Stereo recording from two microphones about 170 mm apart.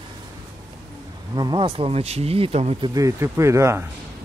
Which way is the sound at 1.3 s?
25° right (ahead or behind).